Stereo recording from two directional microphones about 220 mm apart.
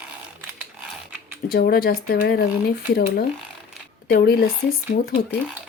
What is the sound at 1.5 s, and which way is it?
Speech, 45° left (ahead or behind).